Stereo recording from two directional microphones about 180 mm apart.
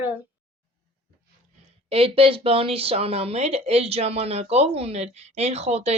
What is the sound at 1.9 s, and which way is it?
Speech, 30° right (ahead or behind).